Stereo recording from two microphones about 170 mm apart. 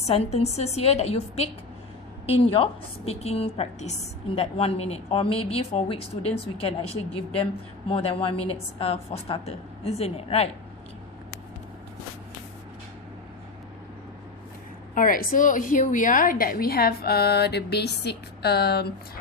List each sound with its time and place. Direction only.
0.0 s speech: 40° left (ahead or behind)
14.9 s a woman's voice: 55° left (ahead or behind); by 19.2 s 70° left (ahead or behind)